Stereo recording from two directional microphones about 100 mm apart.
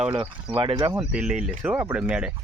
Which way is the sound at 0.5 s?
55° right (ahead or behind).